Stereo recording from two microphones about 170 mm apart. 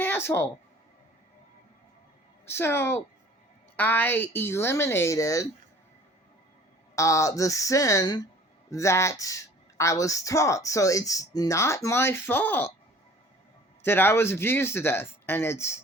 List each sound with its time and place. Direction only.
0.0 s a woman's voice: 15° left (ahead or behind)
2.5 s speech: 15° left (ahead or behind)
6.9 s a woman's voice: 20° left (ahead or behind)
13.8 s speech: 15° left (ahead or behind)